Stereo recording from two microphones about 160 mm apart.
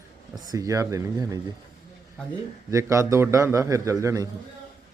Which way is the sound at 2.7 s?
20° right (ahead or behind).